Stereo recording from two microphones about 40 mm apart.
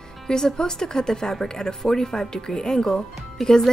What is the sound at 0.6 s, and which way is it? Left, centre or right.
A woman's voice, centre.